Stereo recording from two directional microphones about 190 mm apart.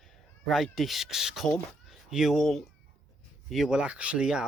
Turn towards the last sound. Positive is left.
turn(degrees=-5)  # may be behind; listen again after turning